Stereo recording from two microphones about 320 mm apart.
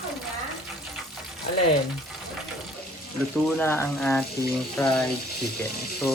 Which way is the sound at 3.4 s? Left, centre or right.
Centre.